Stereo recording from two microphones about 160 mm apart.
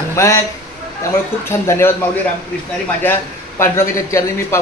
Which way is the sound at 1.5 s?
15° left (ahead or behind).